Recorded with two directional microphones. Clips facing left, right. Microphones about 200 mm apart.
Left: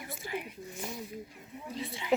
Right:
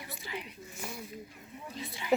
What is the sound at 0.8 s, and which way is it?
Speech, 20° left (ahead or behind).